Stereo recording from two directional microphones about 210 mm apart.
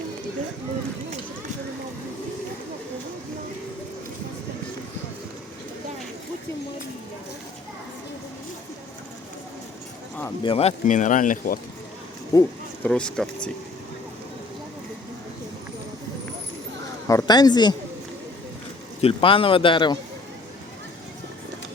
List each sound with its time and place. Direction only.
10.4 s speech: 25° left (ahead or behind)
12.3 s a sound: 15° left (ahead or behind)
12.9 s speech: 5° left (ahead or behind)
17.1 s a man's voice: 15° left (ahead or behind)
19.0 s a man's voice: 25° left (ahead or behind)